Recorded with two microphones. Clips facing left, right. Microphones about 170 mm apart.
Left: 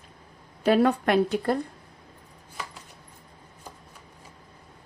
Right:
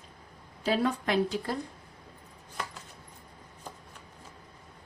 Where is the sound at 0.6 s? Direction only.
60° left (ahead or behind).